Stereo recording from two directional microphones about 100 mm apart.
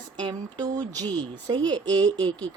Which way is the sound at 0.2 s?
45° right (ahead or behind).